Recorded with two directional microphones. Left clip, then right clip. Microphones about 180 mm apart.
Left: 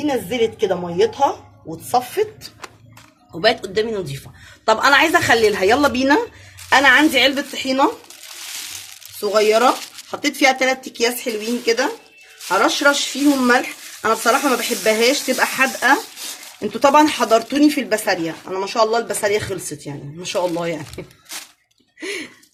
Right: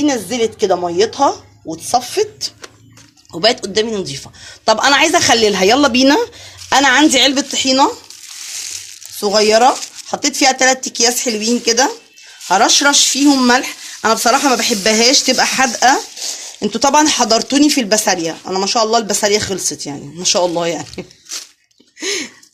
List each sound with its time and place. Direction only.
0.0 s speech: 45° right (ahead or behind)
3.4 s a woman's voice: 30° right (ahead or behind)
9.2 s speech: 45° right (ahead or behind)
16.6 s speech: 30° right (ahead or behind)
22.0 s speech: 55° right (ahead or behind)